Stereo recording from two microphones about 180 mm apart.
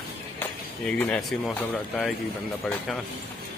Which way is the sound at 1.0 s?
5° left (ahead or behind).